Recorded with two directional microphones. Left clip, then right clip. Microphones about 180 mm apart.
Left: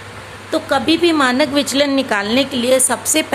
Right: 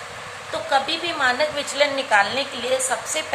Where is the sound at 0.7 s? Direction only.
50° left (ahead or behind).